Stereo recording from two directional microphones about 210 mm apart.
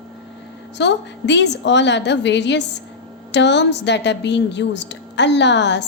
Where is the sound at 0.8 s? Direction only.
55° left (ahead or behind).